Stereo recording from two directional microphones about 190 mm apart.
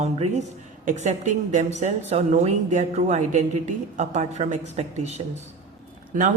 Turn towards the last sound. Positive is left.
turn(degrees=-45)  # may be behind; listen again after turning